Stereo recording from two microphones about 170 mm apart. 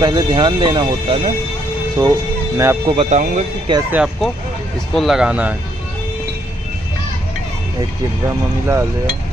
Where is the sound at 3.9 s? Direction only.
5° right (ahead or behind).